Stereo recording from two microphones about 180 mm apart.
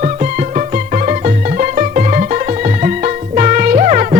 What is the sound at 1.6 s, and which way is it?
Music, 45° right (ahead or behind).